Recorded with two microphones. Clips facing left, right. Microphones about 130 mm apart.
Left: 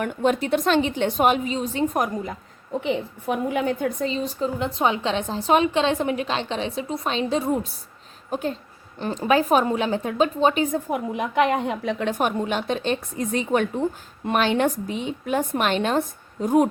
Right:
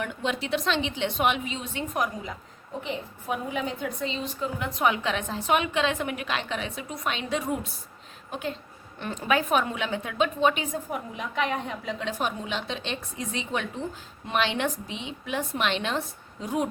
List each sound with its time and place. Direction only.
0.0 s a woman's voice: 50° left (ahead or behind)
2.8 s a woman's voice: 75° left (ahead or behind); by 10.7 s 35° left (ahead or behind)
10.9 s a woman's voice: 85° left; by 16.6 s 50° left (ahead or behind)